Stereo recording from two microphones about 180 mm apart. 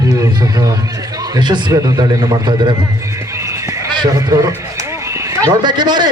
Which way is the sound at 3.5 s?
20° right (ahead or behind).